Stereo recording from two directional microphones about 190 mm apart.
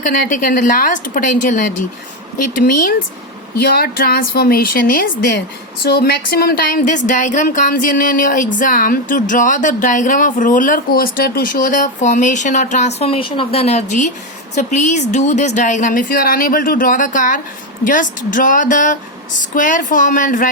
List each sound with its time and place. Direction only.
0.3 s speech: 45° left (ahead or behind)
3.6 s speech: 55° left (ahead or behind)